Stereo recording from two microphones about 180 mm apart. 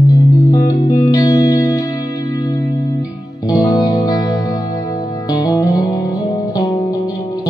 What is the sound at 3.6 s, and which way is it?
Music, 20° left (ahead or behind).